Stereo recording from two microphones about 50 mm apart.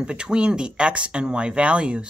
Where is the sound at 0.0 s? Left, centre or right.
Centre.